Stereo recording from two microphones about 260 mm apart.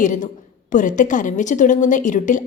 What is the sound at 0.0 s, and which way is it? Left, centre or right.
A woman's voice, left.